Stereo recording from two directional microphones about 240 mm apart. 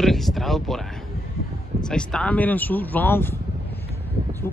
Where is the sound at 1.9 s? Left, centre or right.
Centre.